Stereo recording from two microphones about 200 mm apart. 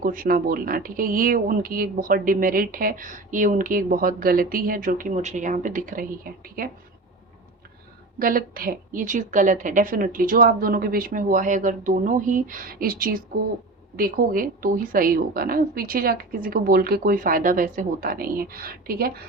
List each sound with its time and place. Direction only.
0.0 s speech: 45° right (ahead or behind)
8.2 s speech: 45° right (ahead or behind)